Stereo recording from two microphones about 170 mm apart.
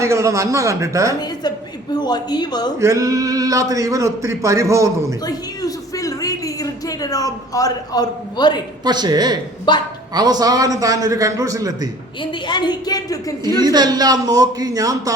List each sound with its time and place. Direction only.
0.0 s speech: 15° right (ahead or behind)
1.2 s speech: 25° left (ahead or behind)
2.8 s speech: 20° right (ahead or behind)
5.2 s a sound: 20° left (ahead or behind)
8.8 s speech: 25° right (ahead or behind)
9.7 s a woman's voice: 25° left (ahead or behind)
10.2 s speech: 25° right (ahead or behind)
12.2 s a woman's voice: 25° left (ahead or behind)
13.6 s speech: 25° right (ahead or behind)